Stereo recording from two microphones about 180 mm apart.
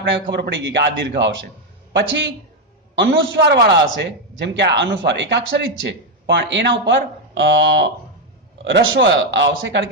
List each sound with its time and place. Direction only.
0.0 s a man's voice: 85° right